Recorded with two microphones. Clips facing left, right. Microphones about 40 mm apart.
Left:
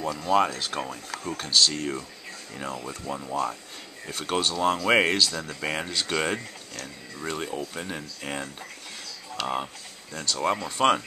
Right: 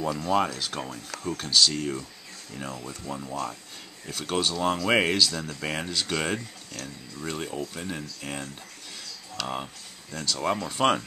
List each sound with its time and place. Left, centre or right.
0.3 s speech: centre